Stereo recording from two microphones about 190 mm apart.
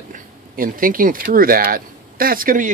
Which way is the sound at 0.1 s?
45° right (ahead or behind).